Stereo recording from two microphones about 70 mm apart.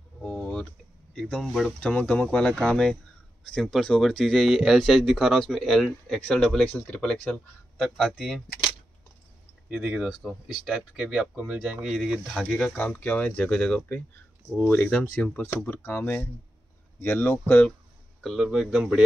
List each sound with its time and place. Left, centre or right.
0.2 s a sound: centre
1.2 s speech: centre
6.6 s speech: left
7.0 s speech: centre
9.7 s speech: centre
12.5 s speech: centre
15.3 s speech: left
18.2 s speech: centre